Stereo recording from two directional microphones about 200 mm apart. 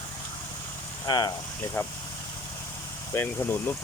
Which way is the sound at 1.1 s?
20° left (ahead or behind).